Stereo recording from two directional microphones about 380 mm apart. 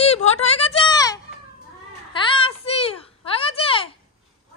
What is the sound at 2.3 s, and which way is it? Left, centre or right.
A child's voice, centre.